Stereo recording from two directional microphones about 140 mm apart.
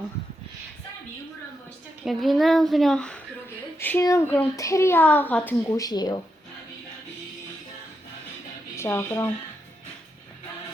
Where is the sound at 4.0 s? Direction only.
20° left (ahead or behind).